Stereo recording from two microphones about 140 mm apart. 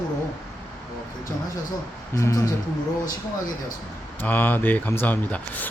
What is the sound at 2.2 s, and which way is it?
Speech, 20° left (ahead or behind).